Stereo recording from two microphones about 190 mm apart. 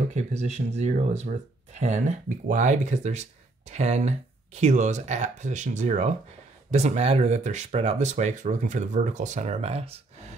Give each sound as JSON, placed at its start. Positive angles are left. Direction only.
{"t": 0.1, "sound": "speech", "side_deg": -35}